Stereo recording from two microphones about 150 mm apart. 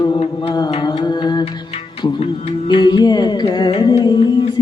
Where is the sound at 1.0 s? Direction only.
30° left (ahead or behind).